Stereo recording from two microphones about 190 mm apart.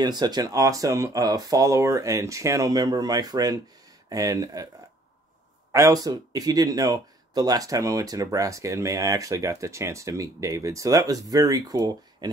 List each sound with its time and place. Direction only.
0.0 s speech: 20° right (ahead or behind)
5.7 s speech: 15° right (ahead or behind)